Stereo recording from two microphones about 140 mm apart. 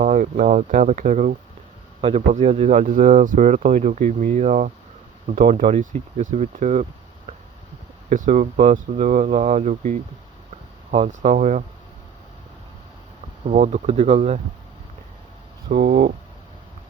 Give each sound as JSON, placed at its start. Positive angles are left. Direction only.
{"t": 0.0, "sound": "speech", "side_deg": -60}
{"t": 2.0, "sound": "speech", "side_deg": -55}
{"t": 5.4, "sound": "speech", "side_deg": -90}
{"t": 5.8, "sound": "speech", "side_deg": -55}
{"t": 8.1, "sound": "speech", "side_deg": -65}
{"t": 13.5, "sound": "speech", "side_deg": -55}
{"t": 15.7, "sound": "speech", "side_deg": -80}